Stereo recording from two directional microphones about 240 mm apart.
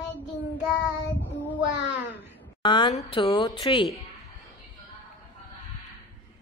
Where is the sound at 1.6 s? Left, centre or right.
Left.